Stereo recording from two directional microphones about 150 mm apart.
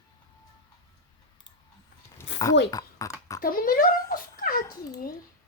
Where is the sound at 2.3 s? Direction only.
25° left (ahead or behind).